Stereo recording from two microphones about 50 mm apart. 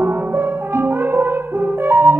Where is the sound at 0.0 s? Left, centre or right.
Right.